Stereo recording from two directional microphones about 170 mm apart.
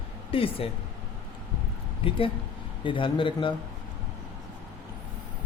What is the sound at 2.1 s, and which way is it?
A man's voice, 35° left (ahead or behind).